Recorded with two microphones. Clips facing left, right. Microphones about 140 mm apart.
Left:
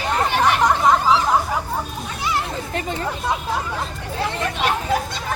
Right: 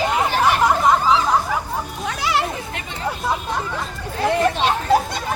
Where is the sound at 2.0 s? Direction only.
90° right.